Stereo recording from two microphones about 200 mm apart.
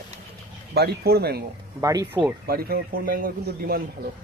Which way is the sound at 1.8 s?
20° right (ahead or behind).